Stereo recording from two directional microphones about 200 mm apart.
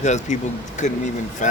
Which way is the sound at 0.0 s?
35° left (ahead or behind).